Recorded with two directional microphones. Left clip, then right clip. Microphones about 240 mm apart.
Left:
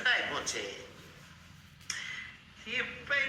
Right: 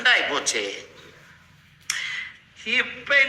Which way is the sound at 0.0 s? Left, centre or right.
Right.